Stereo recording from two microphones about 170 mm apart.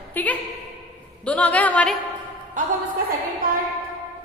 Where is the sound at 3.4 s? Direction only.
60° right (ahead or behind).